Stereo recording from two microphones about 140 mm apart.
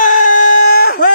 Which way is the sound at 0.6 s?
90° left.